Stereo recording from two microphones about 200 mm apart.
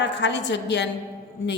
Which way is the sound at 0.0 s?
60° left (ahead or behind).